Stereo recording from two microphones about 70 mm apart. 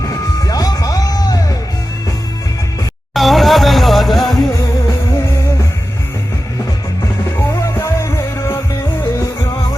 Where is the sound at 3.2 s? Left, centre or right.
Centre.